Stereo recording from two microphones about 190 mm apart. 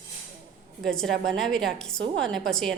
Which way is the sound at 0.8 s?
5° left (ahead or behind).